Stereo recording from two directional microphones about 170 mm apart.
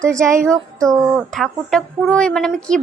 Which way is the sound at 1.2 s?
Centre (ahead or behind).